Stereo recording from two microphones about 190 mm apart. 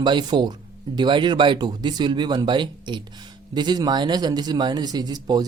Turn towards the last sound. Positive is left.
turn(degrees=-20)  # may be behind; listen again after turning